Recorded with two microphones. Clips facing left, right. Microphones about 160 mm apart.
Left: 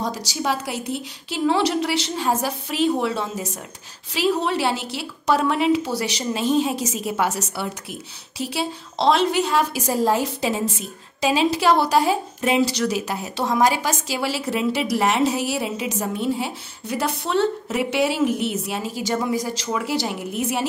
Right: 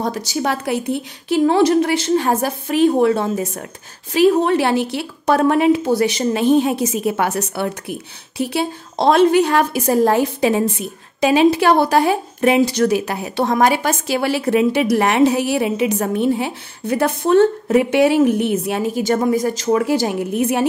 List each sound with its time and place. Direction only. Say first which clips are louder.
0.0 s a woman's voice: right 5 dB; 55° right (ahead or behind)